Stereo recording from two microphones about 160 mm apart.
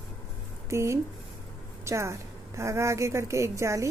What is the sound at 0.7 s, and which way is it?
A woman's voice, 15° right (ahead or behind).